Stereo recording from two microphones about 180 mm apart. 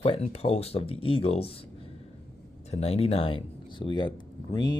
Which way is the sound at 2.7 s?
35° left (ahead or behind).